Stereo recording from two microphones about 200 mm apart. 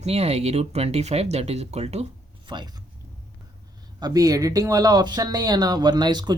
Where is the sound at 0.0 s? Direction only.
30° right (ahead or behind).